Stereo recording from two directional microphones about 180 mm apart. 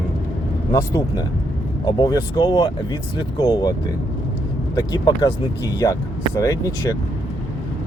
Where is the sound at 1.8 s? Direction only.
20° left (ahead or behind).